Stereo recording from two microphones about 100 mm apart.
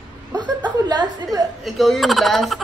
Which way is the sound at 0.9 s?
40° right (ahead or behind).